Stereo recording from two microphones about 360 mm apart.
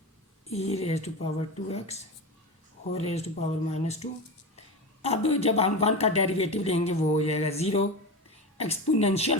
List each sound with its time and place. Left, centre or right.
0.5 s speech: centre